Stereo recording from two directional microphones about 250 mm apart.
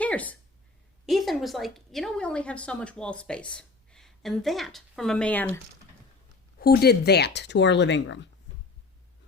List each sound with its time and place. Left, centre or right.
0.0 s a sound: centre
1.0 s a woman's voice: centre
6.6 s speech: left